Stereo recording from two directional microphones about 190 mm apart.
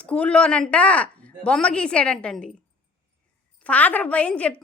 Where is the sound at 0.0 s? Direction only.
5° left (ahead or behind).